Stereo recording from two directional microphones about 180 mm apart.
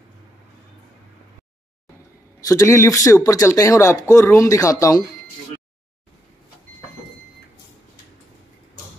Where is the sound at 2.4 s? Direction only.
15° left (ahead or behind).